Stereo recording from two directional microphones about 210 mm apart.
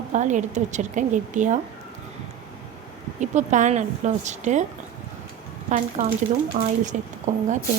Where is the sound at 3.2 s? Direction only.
35° right (ahead or behind).